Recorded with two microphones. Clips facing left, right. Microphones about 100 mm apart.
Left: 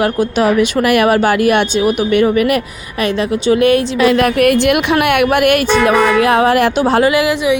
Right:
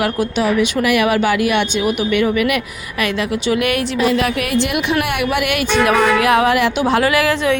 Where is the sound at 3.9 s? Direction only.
65° left (ahead or behind); by 7.0 s 40° left (ahead or behind).